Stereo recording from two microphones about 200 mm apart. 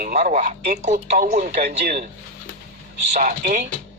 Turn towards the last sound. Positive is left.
turn(degrees=-40)  # may be behind; listen again after turning